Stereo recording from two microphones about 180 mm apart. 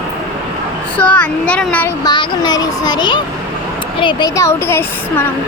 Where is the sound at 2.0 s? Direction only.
25° left (ahead or behind).